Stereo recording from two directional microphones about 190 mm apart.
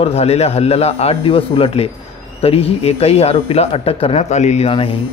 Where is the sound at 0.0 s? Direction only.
30° left (ahead or behind).